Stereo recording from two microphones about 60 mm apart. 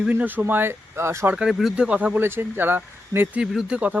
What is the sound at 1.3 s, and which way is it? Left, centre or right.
Speech, centre.